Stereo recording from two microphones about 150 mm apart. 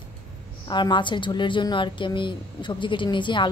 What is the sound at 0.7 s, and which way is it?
A woman's voice, 30° left (ahead or behind).